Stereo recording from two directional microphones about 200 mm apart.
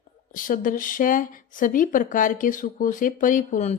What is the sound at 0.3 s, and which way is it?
Speech, 40° left (ahead or behind).